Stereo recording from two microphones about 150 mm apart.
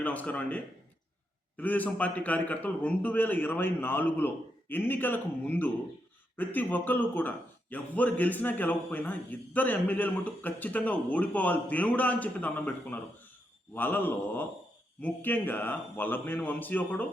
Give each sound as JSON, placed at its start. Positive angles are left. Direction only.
{"t": 0.0, "sound": "a man's voice", "side_deg": 10}